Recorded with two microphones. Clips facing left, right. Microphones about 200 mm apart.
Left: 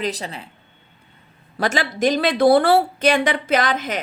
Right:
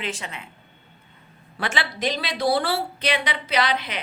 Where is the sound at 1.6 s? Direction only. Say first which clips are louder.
Left 7 dB; 40° left (ahead or behind).